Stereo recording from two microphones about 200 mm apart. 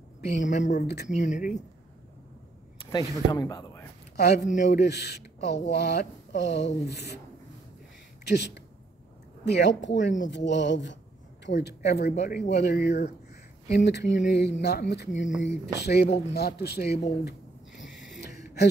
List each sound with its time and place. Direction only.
0.4 s speech: 40° left (ahead or behind)
0.7 s speech: 55° left (ahead or behind)
1.0 s speech: 40° left (ahead or behind)
2.9 s speech: 20° left (ahead or behind)
4.6 s speech: 55° left (ahead or behind)
8.3 s speech: 55° left (ahead or behind)
17.2 s a sound: 60° left (ahead or behind)